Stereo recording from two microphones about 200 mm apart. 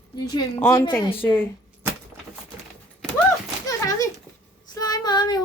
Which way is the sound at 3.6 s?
15° left (ahead or behind).